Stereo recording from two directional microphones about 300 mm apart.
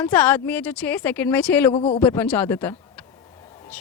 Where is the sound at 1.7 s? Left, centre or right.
Centre.